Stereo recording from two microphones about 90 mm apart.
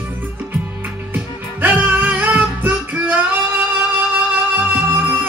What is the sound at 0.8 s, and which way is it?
Music, 20° right (ahead or behind).